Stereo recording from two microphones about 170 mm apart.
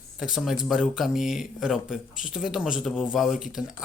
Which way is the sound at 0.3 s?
Centre (ahead or behind).